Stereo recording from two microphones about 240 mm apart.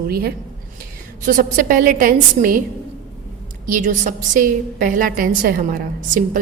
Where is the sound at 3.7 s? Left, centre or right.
Right.